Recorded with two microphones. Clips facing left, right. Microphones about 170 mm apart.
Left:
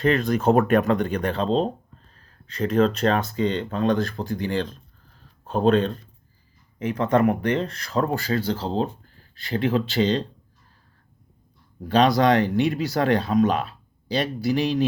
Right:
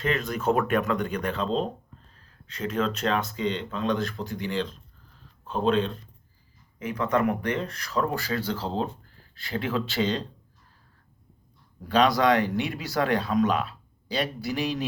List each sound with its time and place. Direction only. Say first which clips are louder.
0.0 s speech: left 6 dB; 35° left (ahead or behind)
7.0 s speech: left 5 dB; 30° left (ahead or behind)
10.0 s speech: left 5 dB; 35° left (ahead or behind)
12.0 s speech: left 3 dB; 35° left (ahead or behind)